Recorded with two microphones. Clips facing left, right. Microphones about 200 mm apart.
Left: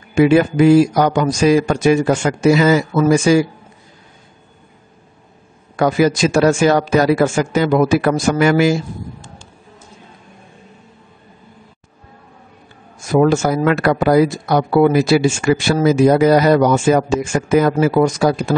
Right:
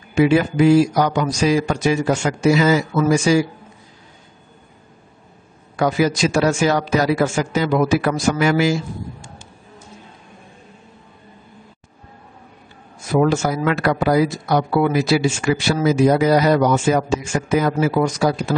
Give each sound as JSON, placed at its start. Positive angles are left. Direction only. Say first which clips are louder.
{"t": 0.1, "sound": "speech", "louder": "left 3 dB", "side_deg": 50}
{"t": 5.8, "sound": "speech", "louder": "left 3 dB", "side_deg": 50}
{"t": 13.1, "sound": "speech", "louder": "left 4 dB", "side_deg": 50}